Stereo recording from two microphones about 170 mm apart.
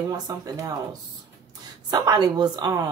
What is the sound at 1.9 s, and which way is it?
Speech, 25° right (ahead or behind).